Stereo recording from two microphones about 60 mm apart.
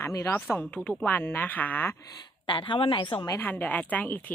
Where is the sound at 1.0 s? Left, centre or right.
Left.